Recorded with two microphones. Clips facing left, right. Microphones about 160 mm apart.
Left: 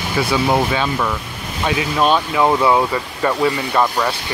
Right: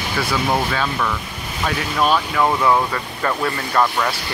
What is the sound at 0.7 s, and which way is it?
Speech, 10° left (ahead or behind).